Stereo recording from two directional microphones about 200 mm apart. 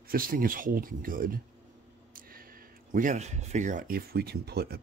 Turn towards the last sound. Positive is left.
turn(degrees=-55)  # may be behind; listen again after turning